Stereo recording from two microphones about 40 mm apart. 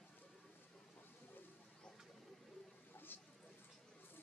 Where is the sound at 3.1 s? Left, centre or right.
Left.